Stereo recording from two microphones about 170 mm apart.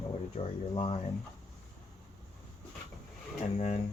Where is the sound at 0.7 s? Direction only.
30° left (ahead or behind).